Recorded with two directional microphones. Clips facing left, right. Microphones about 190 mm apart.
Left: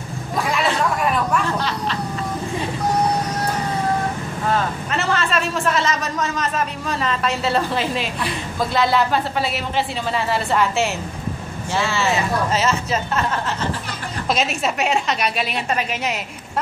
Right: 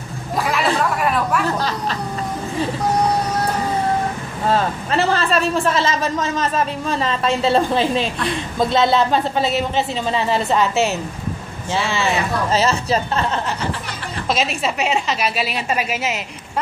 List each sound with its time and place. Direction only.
0.4 s a sound: centre (ahead or behind)
1.6 s speech: 40° right (ahead or behind)
4.5 s a man's voice: 35° right (ahead or behind); by 12.2 s 15° right (ahead or behind)
12.4 s a woman's voice: 35° right (ahead or behind)
14.3 s a woman's voice: centre (ahead or behind)